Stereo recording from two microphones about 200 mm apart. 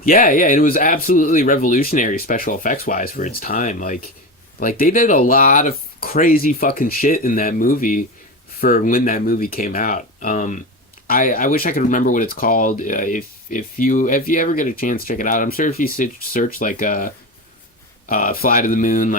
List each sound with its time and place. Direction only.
0.0 s speech: 45° left (ahead or behind)